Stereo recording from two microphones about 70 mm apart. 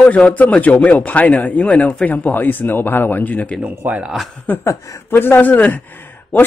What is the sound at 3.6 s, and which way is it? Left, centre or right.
Speech, right.